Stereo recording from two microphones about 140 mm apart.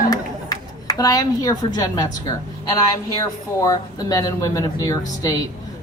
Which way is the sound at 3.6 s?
25° left (ahead or behind).